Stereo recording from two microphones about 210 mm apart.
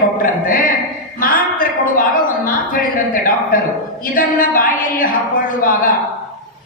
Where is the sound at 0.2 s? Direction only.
40° left (ahead or behind).